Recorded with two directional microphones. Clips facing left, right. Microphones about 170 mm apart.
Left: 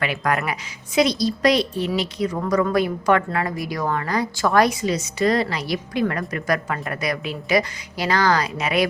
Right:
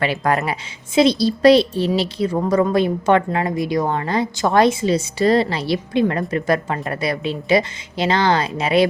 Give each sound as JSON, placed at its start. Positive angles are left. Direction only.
{"t": 0.0, "sound": "a woman's voice", "side_deg": -30}